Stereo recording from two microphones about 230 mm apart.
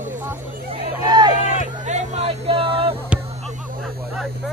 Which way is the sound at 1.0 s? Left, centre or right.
Centre.